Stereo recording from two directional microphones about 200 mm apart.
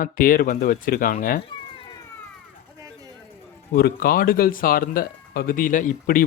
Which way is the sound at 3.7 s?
50° left (ahead or behind).